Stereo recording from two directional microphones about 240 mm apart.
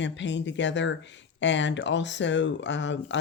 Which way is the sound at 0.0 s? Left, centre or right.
Left.